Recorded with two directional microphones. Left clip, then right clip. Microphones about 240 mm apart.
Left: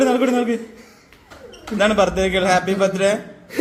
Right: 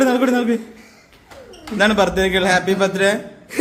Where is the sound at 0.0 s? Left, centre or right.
Centre.